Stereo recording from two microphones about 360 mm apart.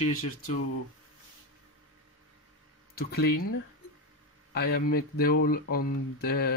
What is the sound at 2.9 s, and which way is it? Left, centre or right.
Speech, left.